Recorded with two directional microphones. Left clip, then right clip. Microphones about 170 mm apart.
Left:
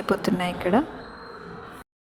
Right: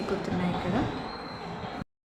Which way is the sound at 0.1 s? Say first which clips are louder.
Left 8 dB; 60° left (ahead or behind).